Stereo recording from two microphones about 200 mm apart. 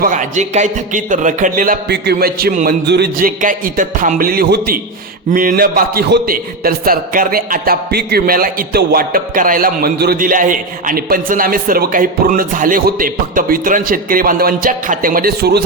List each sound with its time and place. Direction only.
0.0 s a man's voice: 40° right (ahead or behind)
2.8 s a man's voice: 55° right (ahead or behind)